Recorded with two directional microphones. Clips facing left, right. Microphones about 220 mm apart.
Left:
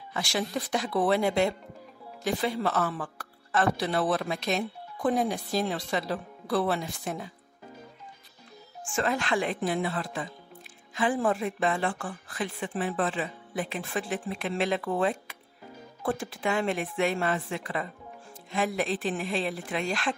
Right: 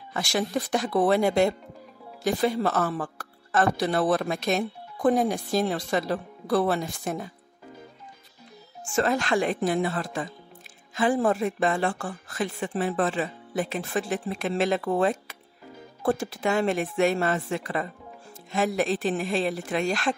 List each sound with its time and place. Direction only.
0.1 s speech: 45° right (ahead or behind)
8.9 s a woman's voice: 40° right (ahead or behind)